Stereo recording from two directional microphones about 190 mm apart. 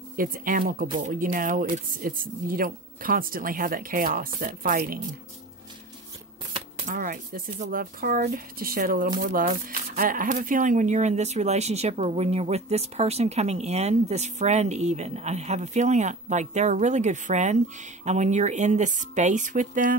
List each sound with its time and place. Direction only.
0.1 s speech: 45° right (ahead or behind)
6.5 s speech: 40° right (ahead or behind)